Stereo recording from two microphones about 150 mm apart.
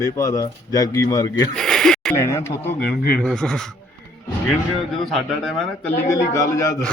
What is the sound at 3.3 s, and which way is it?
Speech, 5° left (ahead or behind).